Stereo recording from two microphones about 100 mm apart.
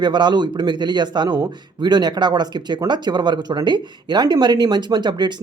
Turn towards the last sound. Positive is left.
turn(degrees=-50)  # may be behind; listen again after turning